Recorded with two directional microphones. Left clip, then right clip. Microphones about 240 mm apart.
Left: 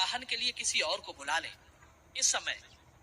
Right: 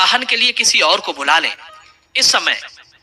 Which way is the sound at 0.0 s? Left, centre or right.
Right.